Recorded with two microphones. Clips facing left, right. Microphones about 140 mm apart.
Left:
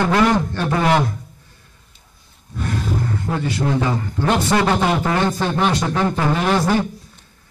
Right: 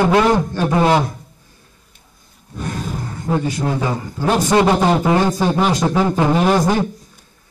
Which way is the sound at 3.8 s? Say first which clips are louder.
Even; 10° right (ahead or behind).